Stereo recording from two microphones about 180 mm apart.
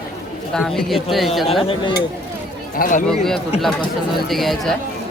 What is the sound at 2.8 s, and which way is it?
Speech, 45° left (ahead or behind).